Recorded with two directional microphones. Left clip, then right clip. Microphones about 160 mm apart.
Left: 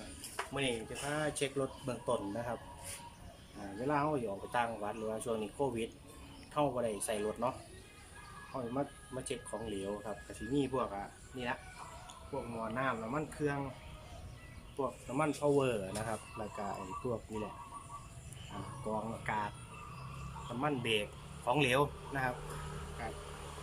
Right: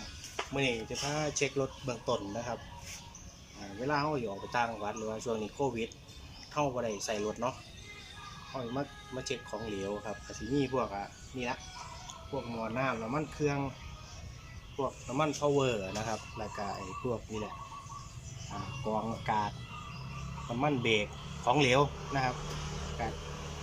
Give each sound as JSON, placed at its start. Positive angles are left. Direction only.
{"t": 0.3, "sound": "speech", "side_deg": -15}
{"t": 3.8, "sound": "speech", "side_deg": 0}
{"t": 5.5, "sound": "speech", "side_deg": 10}
{"t": 8.5, "sound": "speech", "side_deg": 0}
{"t": 14.8, "sound": "speech", "side_deg": 0}
{"t": 18.9, "sound": "speech", "side_deg": -15}
{"t": 20.8, "sound": "a man's voice", "side_deg": -20}
{"t": 21.8, "sound": "speech", "side_deg": -5}